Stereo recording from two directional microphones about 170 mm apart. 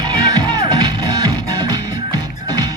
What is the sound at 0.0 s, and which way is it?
Music, 25° right (ahead or behind).